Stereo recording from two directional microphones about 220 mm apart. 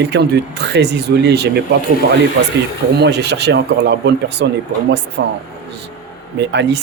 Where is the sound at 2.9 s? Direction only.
50° right (ahead or behind).